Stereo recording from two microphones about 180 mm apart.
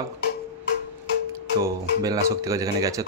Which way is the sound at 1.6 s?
15° right (ahead or behind).